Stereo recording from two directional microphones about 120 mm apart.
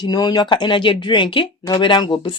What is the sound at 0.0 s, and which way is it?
Speech, 35° left (ahead or behind).